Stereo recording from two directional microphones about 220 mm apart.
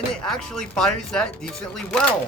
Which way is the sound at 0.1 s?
Centre (ahead or behind).